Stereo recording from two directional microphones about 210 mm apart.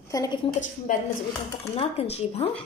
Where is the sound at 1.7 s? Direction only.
30° left (ahead or behind).